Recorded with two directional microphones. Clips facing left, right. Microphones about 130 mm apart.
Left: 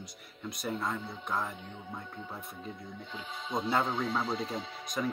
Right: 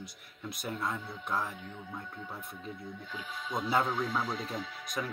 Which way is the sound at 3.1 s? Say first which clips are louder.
Left 1 dB; 25° left (ahead or behind).